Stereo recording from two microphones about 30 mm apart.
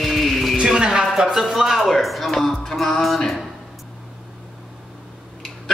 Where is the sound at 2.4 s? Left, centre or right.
Centre.